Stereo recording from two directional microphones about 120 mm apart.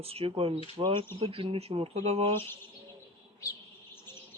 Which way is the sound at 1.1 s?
55° right (ahead or behind).